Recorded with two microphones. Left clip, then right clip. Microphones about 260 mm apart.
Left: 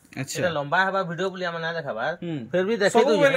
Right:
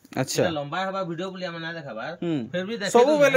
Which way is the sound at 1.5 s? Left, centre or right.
Centre.